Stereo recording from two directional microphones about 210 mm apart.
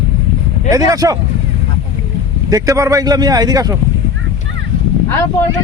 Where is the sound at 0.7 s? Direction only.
15° right (ahead or behind).